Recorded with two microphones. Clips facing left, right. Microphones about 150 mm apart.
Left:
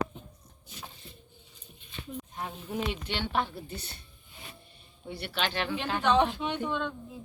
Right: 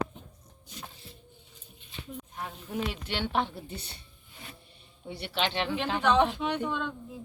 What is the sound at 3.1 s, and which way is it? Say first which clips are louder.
Speech: right 2 dB; 15° right (ahead or behind).